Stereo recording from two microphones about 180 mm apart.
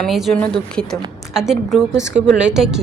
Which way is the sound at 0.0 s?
Centre (ahead or behind).